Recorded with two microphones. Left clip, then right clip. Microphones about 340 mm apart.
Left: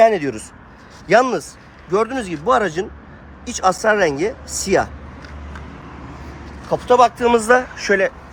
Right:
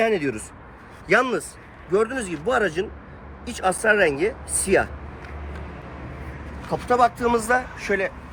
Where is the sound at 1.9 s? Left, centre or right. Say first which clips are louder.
Left 3 dB; left.